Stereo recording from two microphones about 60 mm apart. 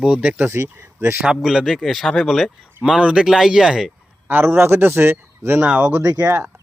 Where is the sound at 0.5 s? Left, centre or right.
Right.